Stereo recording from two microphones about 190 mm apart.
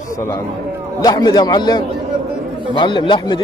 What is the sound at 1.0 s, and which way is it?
A man's voice, 20° left (ahead or behind).